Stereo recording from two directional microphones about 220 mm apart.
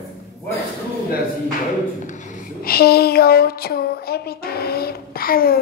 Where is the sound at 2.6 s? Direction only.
45° left (ahead or behind).